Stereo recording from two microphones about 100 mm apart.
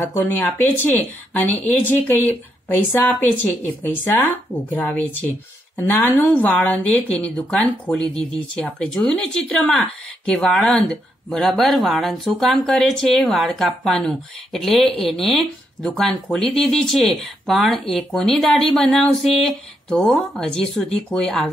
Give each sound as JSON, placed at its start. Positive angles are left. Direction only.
{"t": 0.2, "sound": "speech", "side_deg": 15}